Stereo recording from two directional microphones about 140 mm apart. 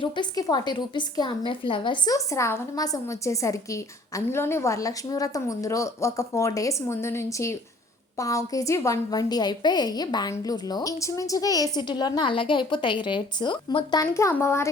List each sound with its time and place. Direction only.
0.0 s a woman's voice: 30° left (ahead or behind)
2.1 s a woman's voice: 20° left (ahead or behind)